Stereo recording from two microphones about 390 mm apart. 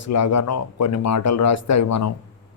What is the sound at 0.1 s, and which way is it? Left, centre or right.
Speech, left.